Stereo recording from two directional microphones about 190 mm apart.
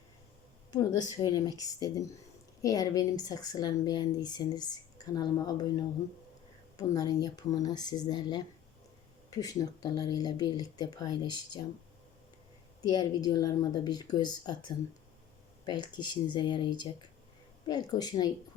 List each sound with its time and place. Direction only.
1.2 s speech: 20° left (ahead or behind)
6.7 s speech: 20° left (ahead or behind)
12.9 s speech: 20° left (ahead or behind)